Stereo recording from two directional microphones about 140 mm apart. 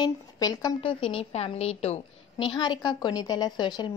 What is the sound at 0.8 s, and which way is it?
A woman's voice, 45° left (ahead or behind).